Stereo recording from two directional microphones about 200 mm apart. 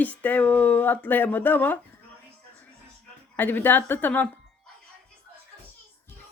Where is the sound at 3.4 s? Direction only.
10° left (ahead or behind).